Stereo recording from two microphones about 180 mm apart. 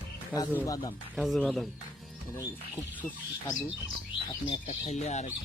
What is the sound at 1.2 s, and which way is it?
Speech, centre (ahead or behind).